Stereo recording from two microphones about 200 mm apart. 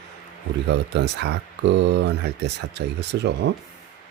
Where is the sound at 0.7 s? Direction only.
60° right (ahead or behind).